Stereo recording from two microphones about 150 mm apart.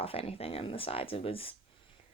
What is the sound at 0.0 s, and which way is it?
A woman's voice, 40° left (ahead or behind).